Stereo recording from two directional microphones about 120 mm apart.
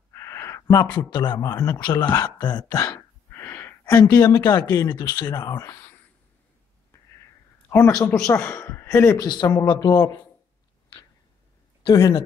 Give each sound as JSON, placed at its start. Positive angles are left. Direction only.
{"t": 0.1, "sound": "a sound", "side_deg": 25}
{"t": 0.9, "sound": "a man's voice", "side_deg": 35}
{"t": 3.3, "sound": "wheeze", "side_deg": 20}
{"t": 4.2, "sound": "a man's voice", "side_deg": 30}
{"t": 7.7, "sound": "a man's voice", "side_deg": 25}
{"t": 9.2, "sound": "a man's voice", "side_deg": 35}
{"t": 11.8, "sound": "speech", "side_deg": 35}